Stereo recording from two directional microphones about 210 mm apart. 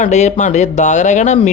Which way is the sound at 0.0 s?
35° left (ahead or behind).